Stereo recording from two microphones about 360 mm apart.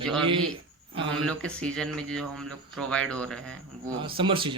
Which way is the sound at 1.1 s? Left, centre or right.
Centre.